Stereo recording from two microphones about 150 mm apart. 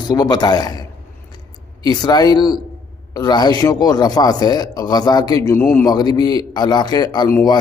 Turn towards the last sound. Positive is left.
turn(degrees=30)  # may be behind; listen again after turning